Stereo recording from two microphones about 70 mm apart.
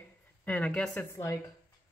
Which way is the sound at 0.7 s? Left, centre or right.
Centre.